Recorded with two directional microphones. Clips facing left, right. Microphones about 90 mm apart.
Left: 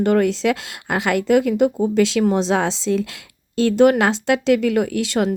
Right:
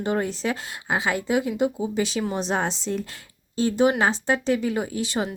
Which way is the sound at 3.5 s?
75° left (ahead or behind).